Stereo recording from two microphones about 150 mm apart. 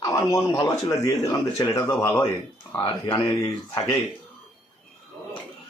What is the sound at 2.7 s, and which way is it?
Speech, 35° left (ahead or behind).